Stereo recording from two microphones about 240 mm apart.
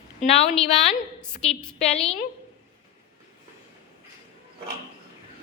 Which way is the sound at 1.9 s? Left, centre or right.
Left.